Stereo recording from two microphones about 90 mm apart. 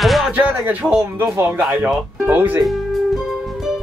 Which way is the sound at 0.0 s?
Centre (ahead or behind).